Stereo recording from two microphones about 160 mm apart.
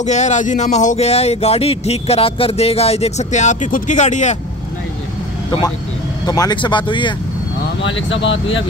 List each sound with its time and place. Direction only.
0.0 s speech: 45° left (ahead or behind)
6.2 s speech: 25° left (ahead or behind)